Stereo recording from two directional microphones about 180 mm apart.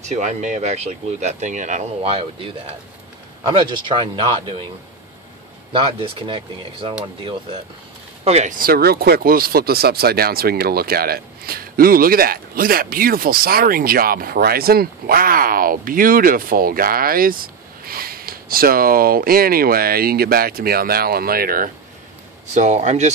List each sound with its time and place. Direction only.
0.1 s speech: 40° right (ahead or behind)
5.7 s speech: 30° right (ahead or behind)
8.2 s speech: 35° right (ahead or behind); by 21.6 s 55° right (ahead or behind)
22.5 s speech: 40° right (ahead or behind)